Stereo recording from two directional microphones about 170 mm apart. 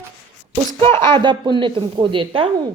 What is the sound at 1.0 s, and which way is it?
Speech, 25° right (ahead or behind).